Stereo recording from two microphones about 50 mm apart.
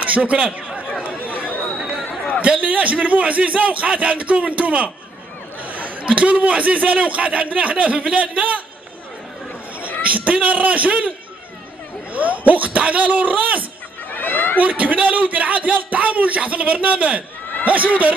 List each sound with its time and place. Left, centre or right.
0.0 s speech: right
1.1 s chatter: right
2.4 s speech: right
10.0 s speech: right
12.1 s a man's voice: right
14.1 s a sound: left
14.6 s a man's voice: right